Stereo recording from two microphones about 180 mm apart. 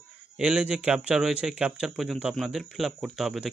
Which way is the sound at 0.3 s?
5° right (ahead or behind).